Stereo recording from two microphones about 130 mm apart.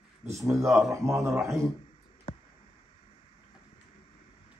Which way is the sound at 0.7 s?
Centre (ahead or behind).